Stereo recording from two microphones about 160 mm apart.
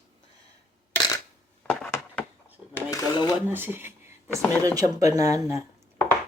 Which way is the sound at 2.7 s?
25° left (ahead or behind).